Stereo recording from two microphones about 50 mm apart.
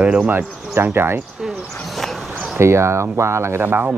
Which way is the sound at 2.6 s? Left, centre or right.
Right.